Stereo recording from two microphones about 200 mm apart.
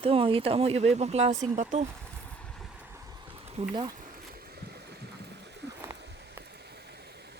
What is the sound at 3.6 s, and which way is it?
Speech, 30° right (ahead or behind).